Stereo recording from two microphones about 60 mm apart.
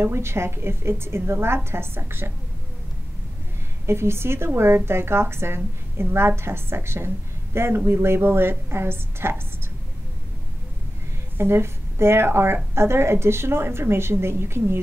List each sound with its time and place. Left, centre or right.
0.0 s a woman's voice: right
3.8 s a woman's voice: right
11.3 s a woman's voice: right